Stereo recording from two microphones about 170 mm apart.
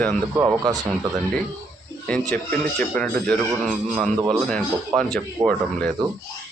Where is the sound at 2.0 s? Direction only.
5° left (ahead or behind).